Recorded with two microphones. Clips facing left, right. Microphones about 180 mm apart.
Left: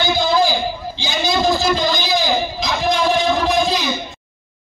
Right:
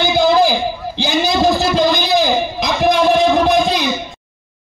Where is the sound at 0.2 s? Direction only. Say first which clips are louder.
Right 6 dB; 60° right (ahead or behind).